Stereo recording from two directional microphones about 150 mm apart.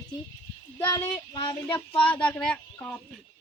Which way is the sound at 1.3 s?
35° left (ahead or behind).